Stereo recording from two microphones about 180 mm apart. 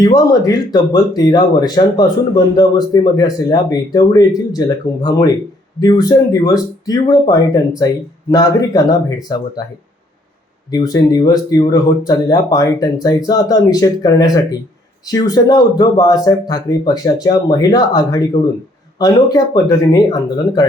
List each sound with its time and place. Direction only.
0.0 s speech: 20° left (ahead or behind)
10.7 s speech: 20° left (ahead or behind)